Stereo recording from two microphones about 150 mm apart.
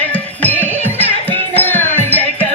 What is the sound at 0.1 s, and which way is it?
Music, 10° left (ahead or behind).